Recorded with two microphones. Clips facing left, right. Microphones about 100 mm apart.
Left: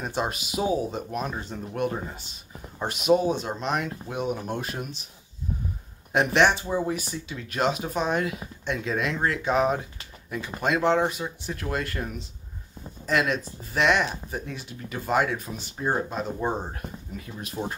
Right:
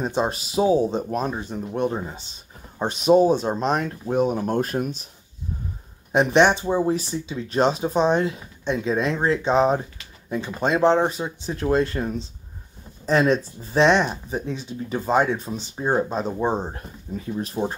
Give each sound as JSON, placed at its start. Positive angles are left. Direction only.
{"t": 0.0, "sound": "speech", "side_deg": -25}
{"t": 1.3, "sound": "speech", "side_deg": -20}
{"t": 6.1, "sound": "speech", "side_deg": -20}